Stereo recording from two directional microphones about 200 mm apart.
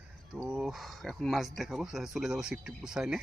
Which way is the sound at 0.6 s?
Centre (ahead or behind).